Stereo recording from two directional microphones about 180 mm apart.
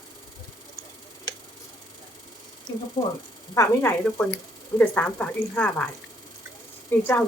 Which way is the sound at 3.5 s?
10° left (ahead or behind).